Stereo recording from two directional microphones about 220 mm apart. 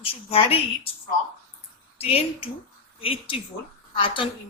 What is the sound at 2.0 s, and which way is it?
A woman's voice, 25° left (ahead or behind).